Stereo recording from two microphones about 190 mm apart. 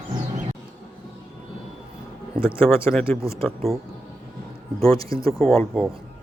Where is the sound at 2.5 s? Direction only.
10° left (ahead or behind).